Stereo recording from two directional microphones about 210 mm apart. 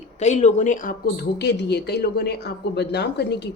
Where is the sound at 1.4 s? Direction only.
50° left (ahead or behind).